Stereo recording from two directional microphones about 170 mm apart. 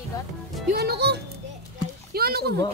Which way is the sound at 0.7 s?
70° right (ahead or behind).